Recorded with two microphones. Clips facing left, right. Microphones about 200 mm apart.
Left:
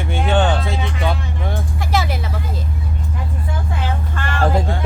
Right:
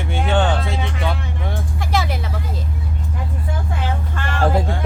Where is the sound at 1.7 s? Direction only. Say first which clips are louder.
Even; 5° left (ahead or behind).